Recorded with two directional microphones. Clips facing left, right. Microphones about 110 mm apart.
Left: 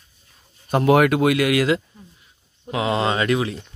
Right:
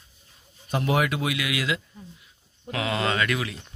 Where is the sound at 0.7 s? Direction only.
55° left (ahead or behind).